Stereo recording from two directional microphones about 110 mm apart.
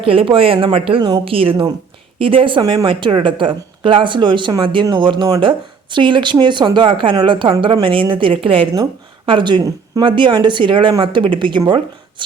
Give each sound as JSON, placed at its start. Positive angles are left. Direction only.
{"t": 0.0, "sound": "speech", "side_deg": -55}